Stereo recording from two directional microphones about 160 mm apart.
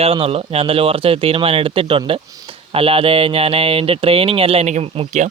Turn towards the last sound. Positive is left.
turn(degrees=-45)  # may be behind; listen again after turning